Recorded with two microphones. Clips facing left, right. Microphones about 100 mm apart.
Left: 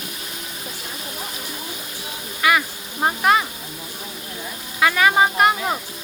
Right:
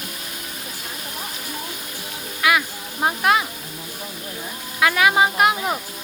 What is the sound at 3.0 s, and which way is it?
Speech, centre (ahead or behind).